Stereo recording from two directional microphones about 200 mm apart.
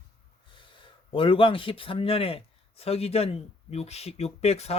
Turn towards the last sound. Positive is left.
turn(degrees=30)  # may be behind; listen again after turning